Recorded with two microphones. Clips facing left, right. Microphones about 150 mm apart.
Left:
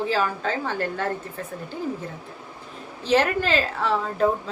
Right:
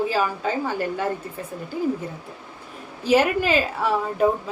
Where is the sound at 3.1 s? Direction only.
10° right (ahead or behind).